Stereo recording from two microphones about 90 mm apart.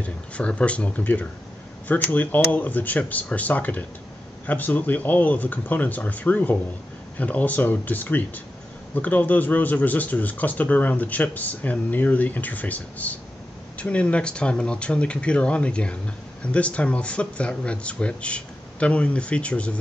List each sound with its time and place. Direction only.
0.0 s speech: 15° left (ahead or behind)